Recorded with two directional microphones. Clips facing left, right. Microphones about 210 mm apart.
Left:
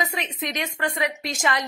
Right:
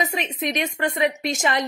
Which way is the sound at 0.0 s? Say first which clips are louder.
Right 3 dB; 20° right (ahead or behind).